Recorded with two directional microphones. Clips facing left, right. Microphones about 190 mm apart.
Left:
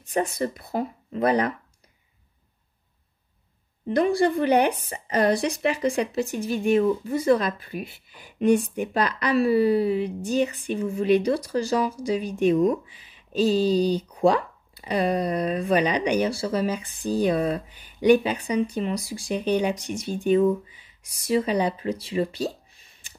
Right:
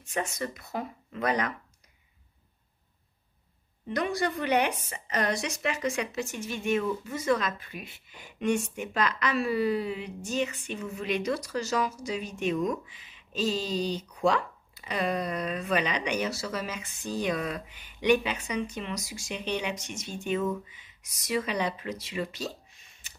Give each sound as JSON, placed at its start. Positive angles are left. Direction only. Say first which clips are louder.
{"t": 0.0, "sound": "a woman's voice", "louder": "left 7 dB", "side_deg": 35}
{"t": 3.8, "sound": "a woman's voice", "louder": "left 8 dB", "side_deg": 30}